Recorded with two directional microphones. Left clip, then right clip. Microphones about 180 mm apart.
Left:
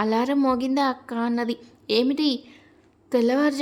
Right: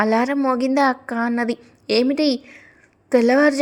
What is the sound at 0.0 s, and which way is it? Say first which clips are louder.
Speech: right 5 dB; 15° right (ahead or behind).